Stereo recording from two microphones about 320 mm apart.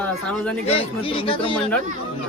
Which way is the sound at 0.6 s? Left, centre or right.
Centre.